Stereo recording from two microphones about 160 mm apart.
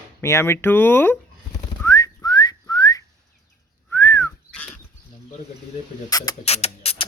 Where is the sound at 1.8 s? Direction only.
20° left (ahead or behind).